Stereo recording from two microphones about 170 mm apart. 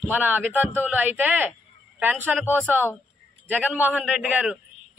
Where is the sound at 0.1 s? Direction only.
10° right (ahead or behind).